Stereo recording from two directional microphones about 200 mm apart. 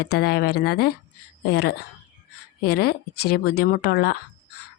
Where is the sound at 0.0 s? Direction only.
50° left (ahead or behind).